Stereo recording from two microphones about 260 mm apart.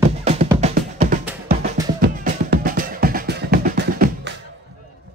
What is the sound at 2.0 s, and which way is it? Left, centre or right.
Music, right.